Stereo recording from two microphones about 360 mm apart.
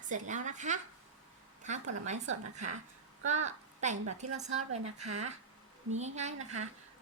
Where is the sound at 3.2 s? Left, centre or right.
Centre.